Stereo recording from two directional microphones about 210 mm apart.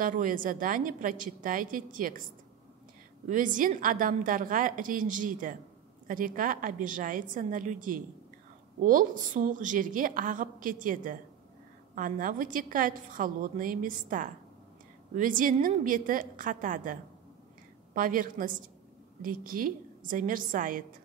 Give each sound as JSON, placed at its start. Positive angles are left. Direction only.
{"t": 0.0, "sound": "a woman's voice", "side_deg": -40}
{"t": 3.3, "sound": "a woman's voice", "side_deg": -40}